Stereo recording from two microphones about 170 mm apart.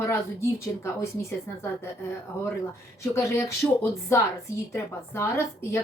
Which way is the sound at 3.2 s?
15° left (ahead or behind).